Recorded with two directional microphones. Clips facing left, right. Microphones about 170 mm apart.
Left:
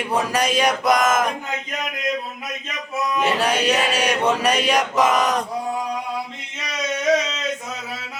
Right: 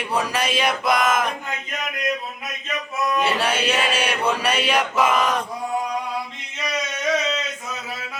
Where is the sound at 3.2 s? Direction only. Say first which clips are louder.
Left 5 dB; 40° left (ahead or behind).